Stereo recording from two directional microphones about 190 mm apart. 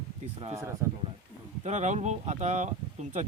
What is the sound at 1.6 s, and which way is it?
Speech, 40° right (ahead or behind).